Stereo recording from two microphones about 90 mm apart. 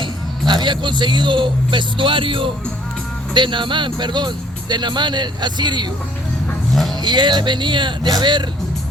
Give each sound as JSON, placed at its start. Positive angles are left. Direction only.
{"t": 0.0, "sound": "speech", "side_deg": -55}
{"t": 3.3, "sound": "speech", "side_deg": -60}
{"t": 7.0, "sound": "speech", "side_deg": -55}